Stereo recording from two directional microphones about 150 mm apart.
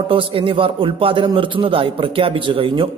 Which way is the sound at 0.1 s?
35° right (ahead or behind).